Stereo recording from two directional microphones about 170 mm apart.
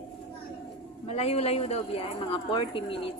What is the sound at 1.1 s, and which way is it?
Speech, 35° left (ahead or behind).